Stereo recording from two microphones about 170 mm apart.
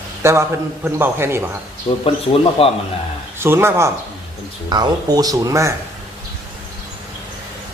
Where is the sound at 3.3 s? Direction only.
15° right (ahead or behind).